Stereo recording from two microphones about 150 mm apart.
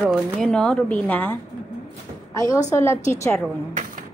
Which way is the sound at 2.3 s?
20° left (ahead or behind).